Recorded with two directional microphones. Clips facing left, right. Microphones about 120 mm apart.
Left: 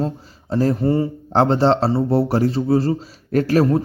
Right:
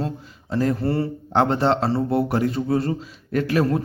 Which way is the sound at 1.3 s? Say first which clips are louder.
Left 3 dB; 30° left (ahead or behind).